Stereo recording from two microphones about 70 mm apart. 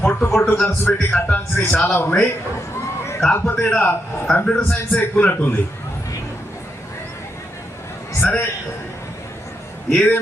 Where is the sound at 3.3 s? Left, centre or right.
Left.